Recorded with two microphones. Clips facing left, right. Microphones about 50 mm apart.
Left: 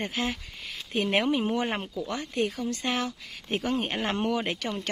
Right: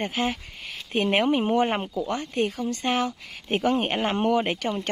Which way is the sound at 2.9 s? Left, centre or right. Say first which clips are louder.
Right 7 dB; right.